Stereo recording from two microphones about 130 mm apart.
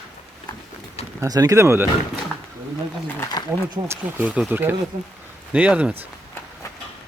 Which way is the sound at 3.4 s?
30° left (ahead or behind).